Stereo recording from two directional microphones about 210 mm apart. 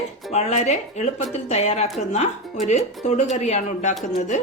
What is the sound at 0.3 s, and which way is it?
Speech, 30° left (ahead or behind).